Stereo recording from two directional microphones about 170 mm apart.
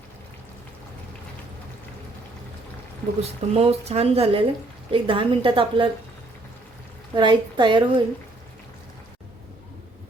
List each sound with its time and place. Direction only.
3.2 s speech: 35° right (ahead or behind)
7.2 s a woman's voice: 25° right (ahead or behind)